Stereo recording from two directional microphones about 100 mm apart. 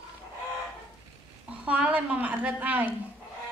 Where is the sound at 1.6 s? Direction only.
10° right (ahead or behind).